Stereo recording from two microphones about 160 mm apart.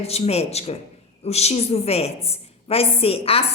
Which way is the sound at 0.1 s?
40° left (ahead or behind).